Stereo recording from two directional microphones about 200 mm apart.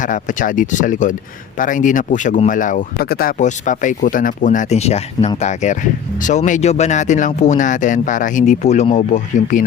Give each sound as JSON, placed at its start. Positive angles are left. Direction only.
{"t": 0.0, "sound": "speech", "side_deg": 40}